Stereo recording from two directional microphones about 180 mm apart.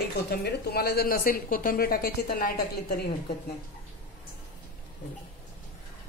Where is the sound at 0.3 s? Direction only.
65° left (ahead or behind).